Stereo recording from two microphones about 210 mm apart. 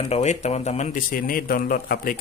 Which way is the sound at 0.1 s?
30° left (ahead or behind).